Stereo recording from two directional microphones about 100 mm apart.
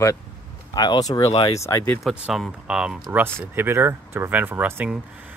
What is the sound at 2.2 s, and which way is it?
Speech, 5° right (ahead or behind).